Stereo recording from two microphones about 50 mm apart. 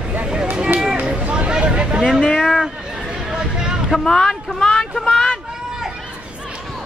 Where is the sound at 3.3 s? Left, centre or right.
Centre.